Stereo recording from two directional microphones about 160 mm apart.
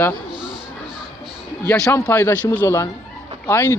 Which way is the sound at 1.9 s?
10° left (ahead or behind).